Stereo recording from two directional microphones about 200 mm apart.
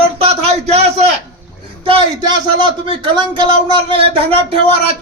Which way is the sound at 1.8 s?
25° right (ahead or behind).